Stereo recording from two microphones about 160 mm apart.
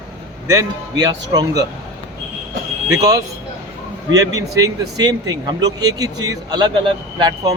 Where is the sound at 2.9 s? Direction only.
20° right (ahead or behind).